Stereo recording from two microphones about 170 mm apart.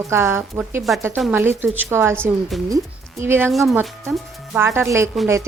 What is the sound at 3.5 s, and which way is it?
Speech, centre (ahead or behind).